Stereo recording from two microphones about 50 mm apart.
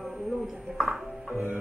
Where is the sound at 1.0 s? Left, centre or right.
Centre.